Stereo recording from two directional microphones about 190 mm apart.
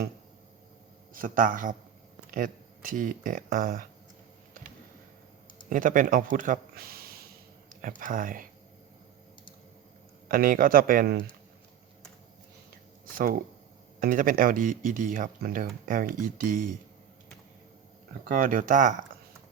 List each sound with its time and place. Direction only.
1.1 s speech: 45° right (ahead or behind)
5.6 s speech: 45° right (ahead or behind)
10.2 s speech: 45° right (ahead or behind)
13.1 s speech: 50° right (ahead or behind)
18.3 s speech: 45° right (ahead or behind)